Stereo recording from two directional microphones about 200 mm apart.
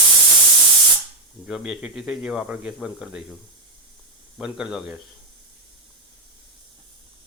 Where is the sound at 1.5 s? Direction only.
Centre (ahead or behind).